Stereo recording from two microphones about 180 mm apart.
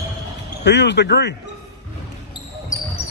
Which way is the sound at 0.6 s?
75° left (ahead or behind).